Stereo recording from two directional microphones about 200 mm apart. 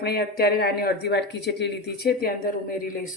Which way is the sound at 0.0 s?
55° left (ahead or behind).